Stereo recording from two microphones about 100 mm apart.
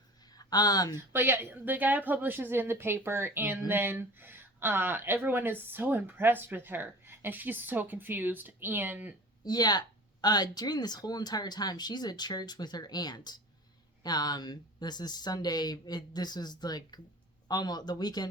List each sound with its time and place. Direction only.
0.3 s speech: 40° left (ahead or behind)
0.9 s speech: 20° right (ahead or behind)
9.4 s speech: 45° left (ahead or behind)